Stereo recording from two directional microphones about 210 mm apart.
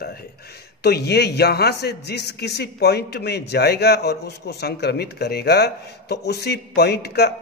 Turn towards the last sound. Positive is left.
turn(degrees=50)  # may be behind; listen again after turning